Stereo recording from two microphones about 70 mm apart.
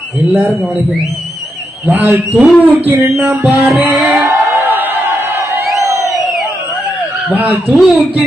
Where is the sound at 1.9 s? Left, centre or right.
Right.